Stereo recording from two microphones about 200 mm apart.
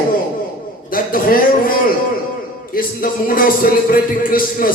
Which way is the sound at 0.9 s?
45° left (ahead or behind).